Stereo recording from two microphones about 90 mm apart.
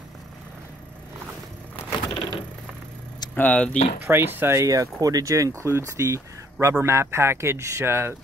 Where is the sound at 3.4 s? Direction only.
15° left (ahead or behind).